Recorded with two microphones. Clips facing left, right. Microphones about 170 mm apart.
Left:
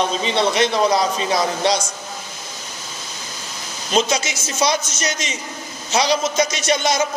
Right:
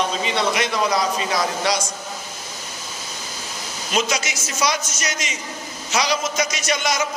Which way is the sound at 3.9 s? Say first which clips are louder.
Left 4 dB; 25° left (ahead or behind).